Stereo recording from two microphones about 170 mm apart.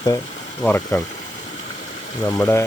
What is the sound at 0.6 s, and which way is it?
Speech, 15° left (ahead or behind).